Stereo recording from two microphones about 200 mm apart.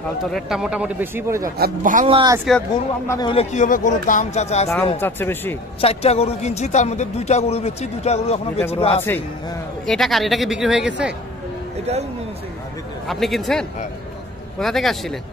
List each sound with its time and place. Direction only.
0.2 s speech: centre (ahead or behind)
1.6 s speech: 40° right (ahead or behind)
2.0 s speech: 25° right (ahead or behind)
3.1 s a man's voice: 20° left (ahead or behind)
3.5 s speech: 40° left (ahead or behind)
5.0 s speech: 10° left (ahead or behind)
5.8 s a man's voice: 30° left (ahead or behind)
9.0 s speech: 10° left (ahead or behind); by 11.1 s 5° right (ahead or behind)
11.8 s speech: 30° right (ahead or behind)
13.0 s speech: centre (ahead or behind)